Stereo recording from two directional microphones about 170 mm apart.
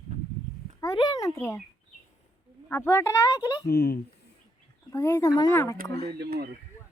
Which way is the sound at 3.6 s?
65° left (ahead or behind).